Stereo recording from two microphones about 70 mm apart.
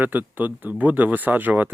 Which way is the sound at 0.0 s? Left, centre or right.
Right.